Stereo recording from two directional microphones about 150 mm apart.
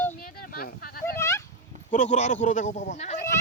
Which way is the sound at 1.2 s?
20° left (ahead or behind).